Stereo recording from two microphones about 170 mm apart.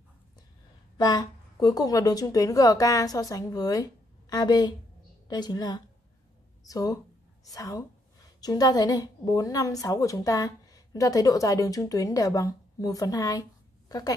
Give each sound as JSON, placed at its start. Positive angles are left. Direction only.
{"t": 0.9, "sound": "a woman's voice", "side_deg": 25}